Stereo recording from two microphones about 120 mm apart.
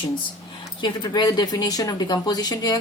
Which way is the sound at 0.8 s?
35° left (ahead or behind).